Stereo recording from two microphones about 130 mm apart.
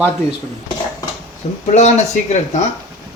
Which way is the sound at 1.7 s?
60° left (ahead or behind).